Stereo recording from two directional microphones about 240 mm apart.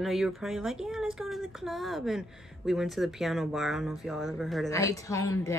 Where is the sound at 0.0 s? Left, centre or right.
Centre.